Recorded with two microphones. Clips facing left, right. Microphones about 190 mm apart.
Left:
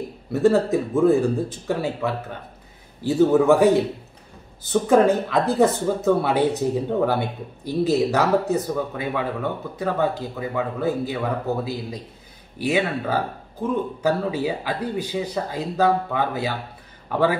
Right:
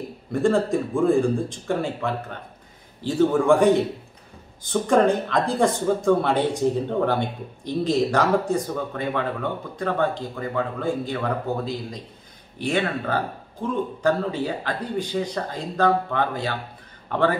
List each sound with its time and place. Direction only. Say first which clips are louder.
0.3 s speech: left 2 dB; 5° left (ahead or behind)